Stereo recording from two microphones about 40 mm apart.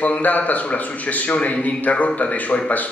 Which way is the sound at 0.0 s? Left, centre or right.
Left.